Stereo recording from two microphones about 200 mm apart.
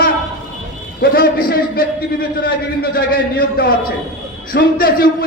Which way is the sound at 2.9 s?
50° left (ahead or behind).